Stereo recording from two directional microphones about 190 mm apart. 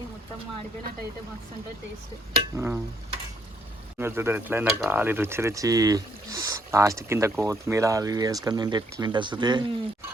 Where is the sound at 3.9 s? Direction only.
10° right (ahead or behind).